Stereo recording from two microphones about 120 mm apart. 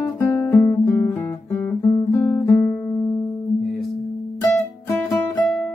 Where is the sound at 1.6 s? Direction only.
20° left (ahead or behind).